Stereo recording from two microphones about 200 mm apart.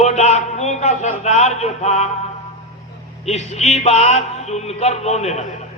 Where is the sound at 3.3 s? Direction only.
35° left (ahead or behind).